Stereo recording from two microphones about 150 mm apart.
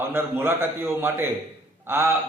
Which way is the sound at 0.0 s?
15° right (ahead or behind).